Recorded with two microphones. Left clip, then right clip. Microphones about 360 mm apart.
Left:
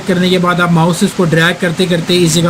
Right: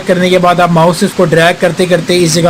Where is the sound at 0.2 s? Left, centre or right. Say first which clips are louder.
Right 4 dB; centre.